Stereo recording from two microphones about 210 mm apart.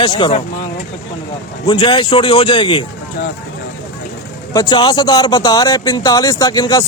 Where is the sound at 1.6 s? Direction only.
20° left (ahead or behind).